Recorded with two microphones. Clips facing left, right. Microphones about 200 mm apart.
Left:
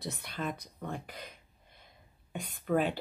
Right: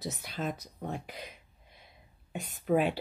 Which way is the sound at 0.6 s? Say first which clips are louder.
Right 2 dB; 50° left (ahead or behind).